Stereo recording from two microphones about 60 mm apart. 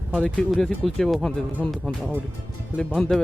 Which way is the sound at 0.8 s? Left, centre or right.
Centre.